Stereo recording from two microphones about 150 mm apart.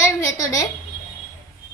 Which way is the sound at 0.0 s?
20° left (ahead or behind).